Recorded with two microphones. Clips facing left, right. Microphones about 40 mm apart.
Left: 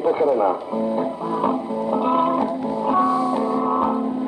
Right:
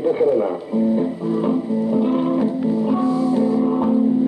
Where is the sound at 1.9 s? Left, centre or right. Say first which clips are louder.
Left 1 dB; left.